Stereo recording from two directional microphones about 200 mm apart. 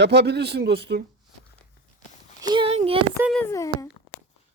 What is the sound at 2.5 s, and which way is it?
Child singing, 30° right (ahead or behind).